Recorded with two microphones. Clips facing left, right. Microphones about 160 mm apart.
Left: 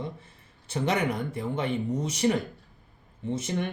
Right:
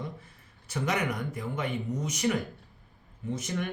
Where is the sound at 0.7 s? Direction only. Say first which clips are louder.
Left 3 dB; 30° left (ahead or behind).